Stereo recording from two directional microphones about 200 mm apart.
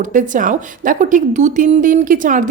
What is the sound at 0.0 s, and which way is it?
A woman's voice, 40° right (ahead or behind).